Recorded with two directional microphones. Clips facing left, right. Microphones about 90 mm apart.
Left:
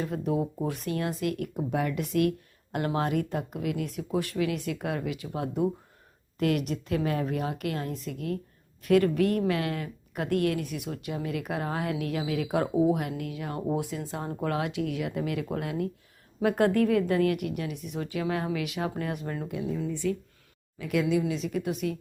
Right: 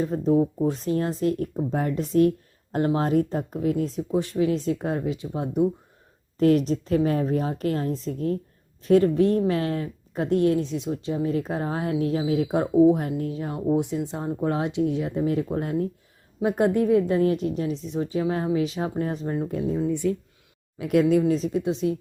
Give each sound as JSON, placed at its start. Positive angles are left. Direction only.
{"t": 0.1, "sound": "a woman's voice", "side_deg": -30}
{"t": 6.4, "sound": "a woman's voice", "side_deg": -35}
{"t": 16.4, "sound": "speech", "side_deg": -20}
{"t": 19.5, "sound": "a woman's voice", "side_deg": -40}